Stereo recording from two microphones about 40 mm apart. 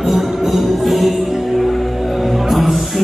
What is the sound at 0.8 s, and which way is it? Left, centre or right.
Music, centre.